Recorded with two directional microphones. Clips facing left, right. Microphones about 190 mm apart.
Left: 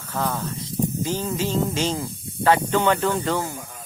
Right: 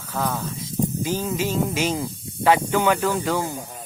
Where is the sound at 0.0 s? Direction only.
Centre (ahead or behind).